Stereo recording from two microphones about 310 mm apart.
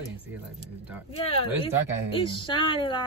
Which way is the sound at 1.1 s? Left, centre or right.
Centre.